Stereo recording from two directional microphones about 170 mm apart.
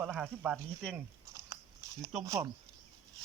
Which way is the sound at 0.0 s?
5° right (ahead or behind).